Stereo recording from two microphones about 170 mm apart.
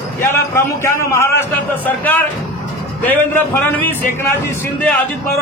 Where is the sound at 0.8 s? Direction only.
15° left (ahead or behind).